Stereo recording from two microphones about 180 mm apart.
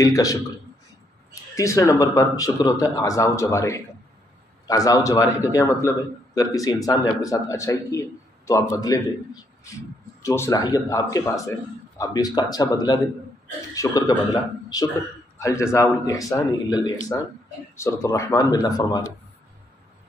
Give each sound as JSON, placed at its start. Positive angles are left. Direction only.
{"t": 0.0, "sound": "a man's voice", "side_deg": 20}
{"t": 1.5, "sound": "a man's voice", "side_deg": 15}